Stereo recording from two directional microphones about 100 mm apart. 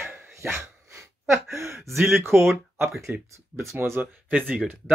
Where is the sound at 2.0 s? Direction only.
25° right (ahead or behind).